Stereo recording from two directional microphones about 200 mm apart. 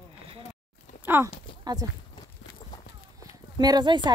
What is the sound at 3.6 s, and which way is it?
Speech, 20° right (ahead or behind).